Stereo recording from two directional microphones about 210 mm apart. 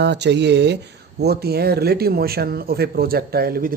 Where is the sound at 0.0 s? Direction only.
55° right (ahead or behind).